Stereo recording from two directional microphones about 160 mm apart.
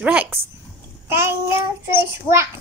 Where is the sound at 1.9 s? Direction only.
15° right (ahead or behind).